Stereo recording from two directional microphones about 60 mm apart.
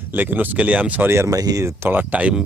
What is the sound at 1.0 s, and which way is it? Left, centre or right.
Speech, right.